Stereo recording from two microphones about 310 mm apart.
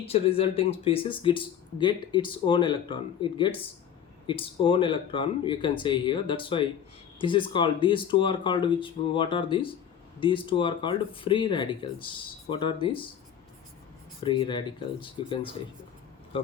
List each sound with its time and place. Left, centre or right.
0.1 s speech: centre
14.2 s speech: centre